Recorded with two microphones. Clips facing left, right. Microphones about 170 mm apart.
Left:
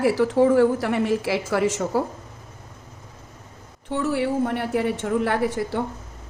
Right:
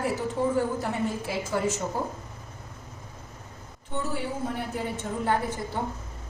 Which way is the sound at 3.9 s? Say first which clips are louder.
Left 8 dB; 80° left.